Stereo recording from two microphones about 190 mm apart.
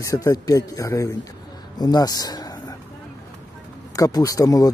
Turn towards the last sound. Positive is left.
turn(degrees=20)  # may be behind; listen again after turning